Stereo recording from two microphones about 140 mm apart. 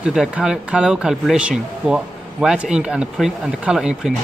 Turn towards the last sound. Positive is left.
turn(degrees=-5)  # may be behind; listen again after turning